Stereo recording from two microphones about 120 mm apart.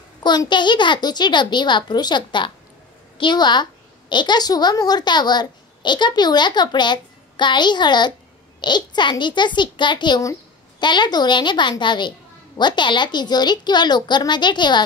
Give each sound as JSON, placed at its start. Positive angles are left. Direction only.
{"t": 0.2, "sound": "a woman's voice", "side_deg": 35}